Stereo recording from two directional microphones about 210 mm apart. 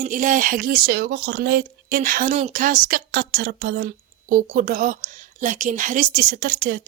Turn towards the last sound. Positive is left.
turn(degrees=-45)  # may be behind; listen again after turning